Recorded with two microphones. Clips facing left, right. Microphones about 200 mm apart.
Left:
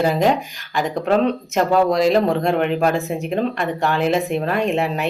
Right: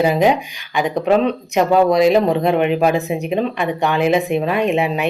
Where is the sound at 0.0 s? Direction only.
15° right (ahead or behind).